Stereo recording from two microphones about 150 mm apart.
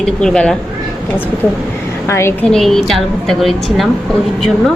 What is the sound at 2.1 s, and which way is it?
Speech, 20° left (ahead or behind).